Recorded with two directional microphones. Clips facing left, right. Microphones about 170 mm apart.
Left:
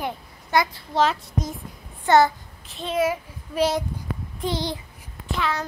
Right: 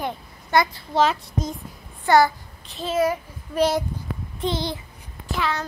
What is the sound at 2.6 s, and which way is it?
A child's voice, centre (ahead or behind).